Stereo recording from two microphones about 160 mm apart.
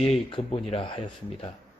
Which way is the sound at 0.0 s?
35° left (ahead or behind).